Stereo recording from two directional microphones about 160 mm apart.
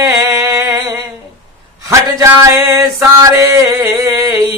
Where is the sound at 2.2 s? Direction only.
20° right (ahead or behind).